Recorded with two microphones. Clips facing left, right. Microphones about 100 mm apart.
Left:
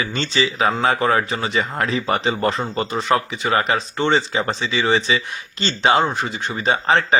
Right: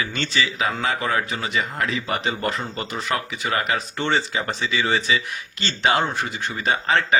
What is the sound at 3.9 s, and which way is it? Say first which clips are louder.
Speech: left 5 dB; 20° left (ahead or behind).